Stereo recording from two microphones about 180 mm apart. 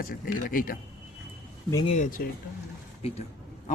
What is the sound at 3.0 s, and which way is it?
Speech, 35° left (ahead or behind).